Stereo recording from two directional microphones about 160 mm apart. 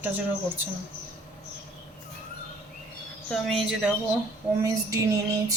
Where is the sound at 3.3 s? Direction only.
Centre (ahead or behind).